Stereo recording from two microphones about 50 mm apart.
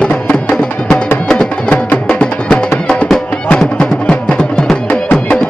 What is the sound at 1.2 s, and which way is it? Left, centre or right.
Music, centre.